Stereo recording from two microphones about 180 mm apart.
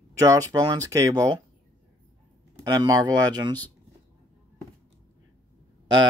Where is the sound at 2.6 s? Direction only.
20° right (ahead or behind).